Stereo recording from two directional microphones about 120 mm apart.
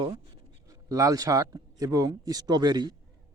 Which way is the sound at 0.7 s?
30° right (ahead or behind).